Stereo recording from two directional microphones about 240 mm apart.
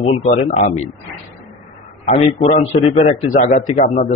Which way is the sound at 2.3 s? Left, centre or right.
Left.